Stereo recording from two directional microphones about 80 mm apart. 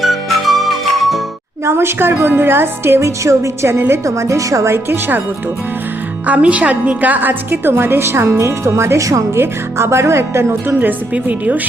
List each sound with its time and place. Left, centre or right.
0.0 s music: centre
1.6 s a woman's voice: right
6.2 s a woman's voice: centre; by 9.4 s right
9.4 s a woman's voice: right; by 11.6 s centre